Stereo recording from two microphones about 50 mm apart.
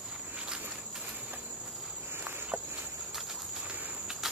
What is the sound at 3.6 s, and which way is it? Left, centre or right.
Cricket, right.